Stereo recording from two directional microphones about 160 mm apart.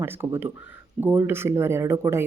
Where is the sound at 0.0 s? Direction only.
15° right (ahead or behind).